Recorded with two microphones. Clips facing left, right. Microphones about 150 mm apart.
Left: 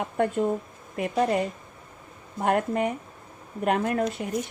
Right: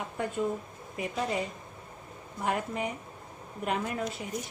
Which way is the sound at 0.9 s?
60° left (ahead or behind).